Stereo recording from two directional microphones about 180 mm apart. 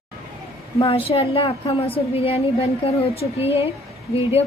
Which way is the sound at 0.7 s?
35° left (ahead or behind).